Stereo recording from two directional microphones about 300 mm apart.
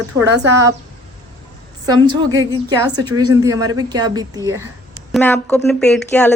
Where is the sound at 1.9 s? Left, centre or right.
Centre.